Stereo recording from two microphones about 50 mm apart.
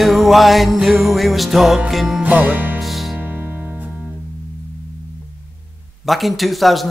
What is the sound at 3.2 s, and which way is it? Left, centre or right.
Music, right.